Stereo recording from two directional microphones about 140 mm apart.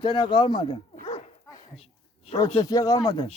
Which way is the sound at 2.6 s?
25° left (ahead or behind).